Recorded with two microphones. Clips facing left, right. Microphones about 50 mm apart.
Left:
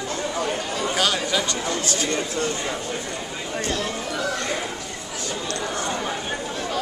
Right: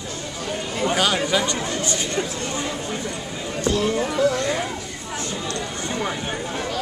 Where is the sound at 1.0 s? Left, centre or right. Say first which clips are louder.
Right 2 dB; centre.